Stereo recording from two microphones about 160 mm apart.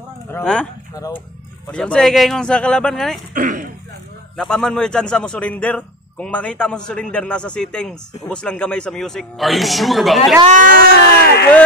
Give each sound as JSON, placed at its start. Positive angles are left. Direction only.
{"t": 0.3, "sound": "speech", "side_deg": 5}
{"t": 1.0, "sound": "speech", "side_deg": -10}
{"t": 1.7, "sound": "speech", "side_deg": 5}
{"t": 3.3, "sound": "speech", "side_deg": -55}
{"t": 4.4, "sound": "speech", "side_deg": 5}
{"t": 10.5, "sound": "speech", "side_deg": -55}
{"t": 10.9, "sound": "speech", "side_deg": 90}